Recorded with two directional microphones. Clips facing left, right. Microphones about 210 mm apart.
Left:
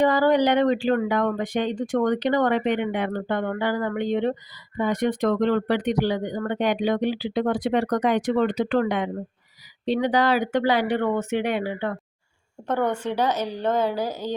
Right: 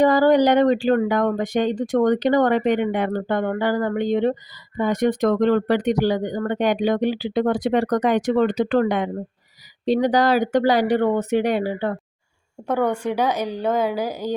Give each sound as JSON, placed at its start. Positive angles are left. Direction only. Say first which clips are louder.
{"t": 0.0, "sound": "speech", "louder": "right 4 dB", "side_deg": -40}
{"t": 12.6, "sound": "speech", "louder": "right 3 dB", "side_deg": -10}